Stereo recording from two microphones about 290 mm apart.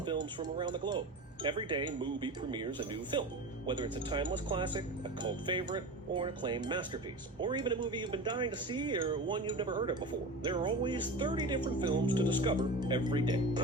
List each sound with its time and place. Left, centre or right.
0.0 s speech: centre